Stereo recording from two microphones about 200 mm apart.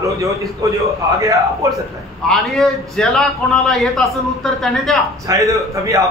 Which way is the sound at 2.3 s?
Centre (ahead or behind).